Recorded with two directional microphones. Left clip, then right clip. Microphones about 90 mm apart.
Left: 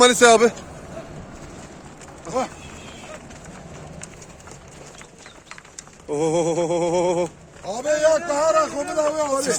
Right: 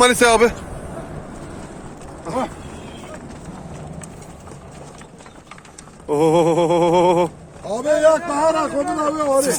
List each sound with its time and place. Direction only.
0.0 s a man's voice: 35° left (ahead or behind)
6.1 s a sound: 30° left (ahead or behind)
7.8 s a man's voice: 35° left (ahead or behind)